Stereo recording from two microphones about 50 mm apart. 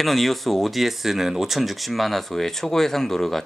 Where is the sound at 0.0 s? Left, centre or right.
Centre.